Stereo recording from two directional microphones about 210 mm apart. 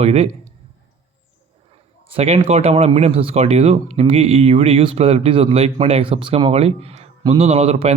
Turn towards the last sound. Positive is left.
turn(degrees=-30)  # may be behind; listen again after turning